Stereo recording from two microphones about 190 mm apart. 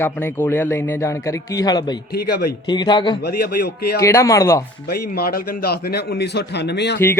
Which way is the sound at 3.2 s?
55° left (ahead or behind).